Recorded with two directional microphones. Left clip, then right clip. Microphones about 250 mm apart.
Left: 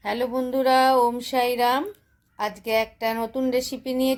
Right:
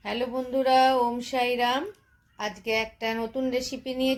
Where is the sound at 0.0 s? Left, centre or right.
Left.